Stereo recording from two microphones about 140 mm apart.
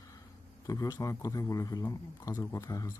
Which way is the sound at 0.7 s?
25° left (ahead or behind).